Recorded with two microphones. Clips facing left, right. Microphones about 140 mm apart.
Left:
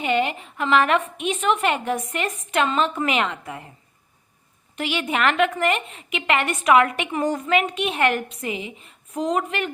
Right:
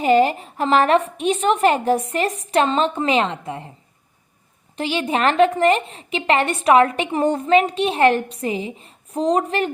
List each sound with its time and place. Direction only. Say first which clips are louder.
0.0 s a woman's voice: right 7 dB; 35° right (ahead or behind)
4.8 s a woman's voice: right 3 dB; 30° right (ahead or behind)